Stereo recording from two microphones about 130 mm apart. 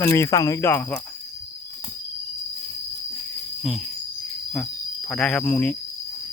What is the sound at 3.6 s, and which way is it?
Cricket, centre (ahead or behind).